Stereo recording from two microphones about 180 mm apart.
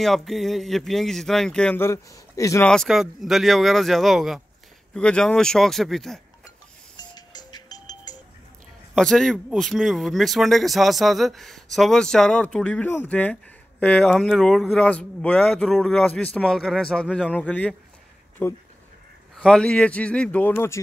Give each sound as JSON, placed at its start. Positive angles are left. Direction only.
{"t": 0.0, "sound": "speech", "side_deg": 0}
{"t": 2.7, "sound": "speech", "side_deg": 0}
{"t": 7.0, "sound": "music", "side_deg": 25}
{"t": 8.9, "sound": "a man's voice", "side_deg": 0}